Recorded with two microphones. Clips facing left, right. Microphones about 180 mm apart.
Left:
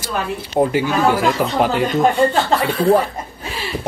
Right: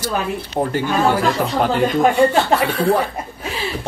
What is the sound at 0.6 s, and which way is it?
Speech, 10° left (ahead or behind).